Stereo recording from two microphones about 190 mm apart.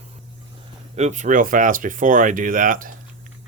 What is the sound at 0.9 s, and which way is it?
Speech, 40° right (ahead or behind).